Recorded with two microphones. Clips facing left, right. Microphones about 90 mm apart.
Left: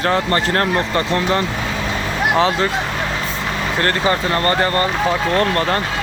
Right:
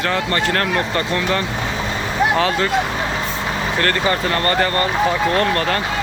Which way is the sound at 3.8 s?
25° left (ahead or behind).